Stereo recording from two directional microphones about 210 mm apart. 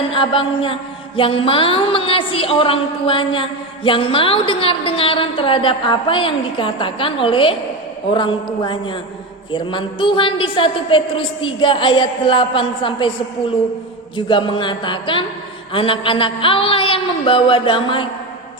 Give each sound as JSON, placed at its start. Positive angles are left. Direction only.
{"t": 0.1, "sound": "mantra", "side_deg": 25}
{"t": 14.2, "sound": "mantra", "side_deg": 25}